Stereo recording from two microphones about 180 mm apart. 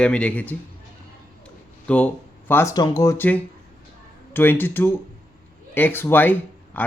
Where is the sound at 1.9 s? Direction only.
5° left (ahead or behind).